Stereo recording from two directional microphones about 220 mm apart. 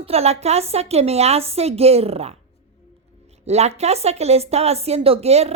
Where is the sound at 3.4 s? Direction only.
30° right (ahead or behind).